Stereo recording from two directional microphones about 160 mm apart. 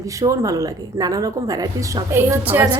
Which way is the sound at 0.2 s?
20° right (ahead or behind).